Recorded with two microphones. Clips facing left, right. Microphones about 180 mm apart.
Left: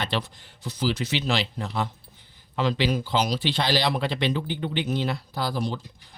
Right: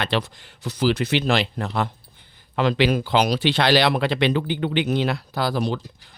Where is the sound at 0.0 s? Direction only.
75° right (ahead or behind).